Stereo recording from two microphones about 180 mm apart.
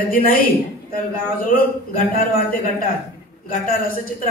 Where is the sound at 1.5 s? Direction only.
55° left (ahead or behind).